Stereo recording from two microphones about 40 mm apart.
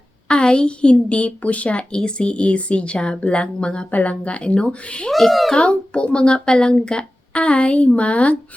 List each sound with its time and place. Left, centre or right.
0.3 s a woman's voice: left
3.9 s a woman's voice: left
5.1 s a child's voice: centre
5.6 s a child's voice: left